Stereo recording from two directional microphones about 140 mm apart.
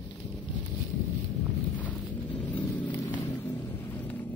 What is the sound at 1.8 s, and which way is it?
Vehicle, 10° left (ahead or behind).